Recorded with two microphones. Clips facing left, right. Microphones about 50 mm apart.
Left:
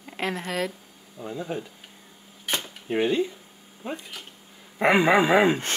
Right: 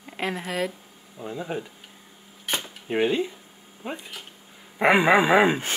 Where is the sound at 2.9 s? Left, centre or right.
Centre.